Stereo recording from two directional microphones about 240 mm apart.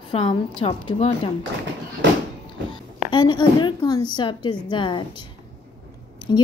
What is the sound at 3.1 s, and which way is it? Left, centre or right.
A woman's voice, centre.